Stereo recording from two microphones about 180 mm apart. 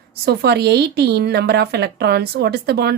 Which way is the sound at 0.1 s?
65° right (ahead or behind).